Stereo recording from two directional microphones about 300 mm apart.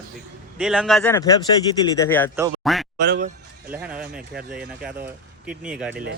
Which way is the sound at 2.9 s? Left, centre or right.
Right.